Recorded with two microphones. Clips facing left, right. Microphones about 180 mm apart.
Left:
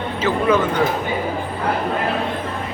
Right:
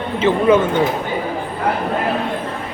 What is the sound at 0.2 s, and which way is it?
Speech, 25° right (ahead or behind).